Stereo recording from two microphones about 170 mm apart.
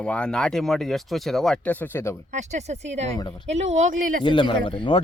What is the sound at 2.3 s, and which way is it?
Speech, 40° right (ahead or behind).